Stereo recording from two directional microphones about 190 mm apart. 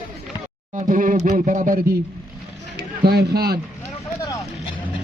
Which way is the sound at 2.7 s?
55° right (ahead or behind).